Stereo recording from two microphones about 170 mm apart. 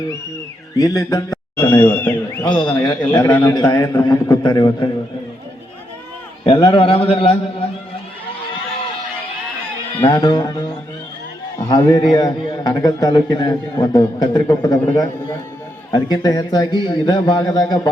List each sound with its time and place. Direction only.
0.8 s a man's voice: 20° left (ahead or behind)
2.4 s a man's voice: 30° left (ahead or behind)
6.4 s a man's voice: 30° left (ahead or behind)
10.0 s a man's voice: 20° left (ahead or behind)
11.7 s a man's voice: 25° left (ahead or behind)